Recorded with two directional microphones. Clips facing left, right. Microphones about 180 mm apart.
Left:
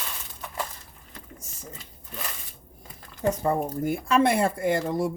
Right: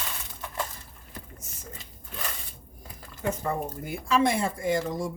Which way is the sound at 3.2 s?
45° left (ahead or behind).